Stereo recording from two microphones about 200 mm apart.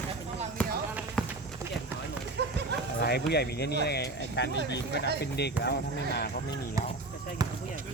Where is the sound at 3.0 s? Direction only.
55° left (ahead or behind).